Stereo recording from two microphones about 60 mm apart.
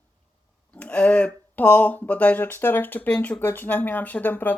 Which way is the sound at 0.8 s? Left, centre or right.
Left.